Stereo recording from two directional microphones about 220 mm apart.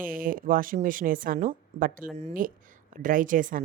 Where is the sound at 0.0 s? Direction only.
40° right (ahead or behind).